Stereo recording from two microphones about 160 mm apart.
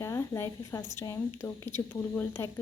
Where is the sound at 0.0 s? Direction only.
15° left (ahead or behind).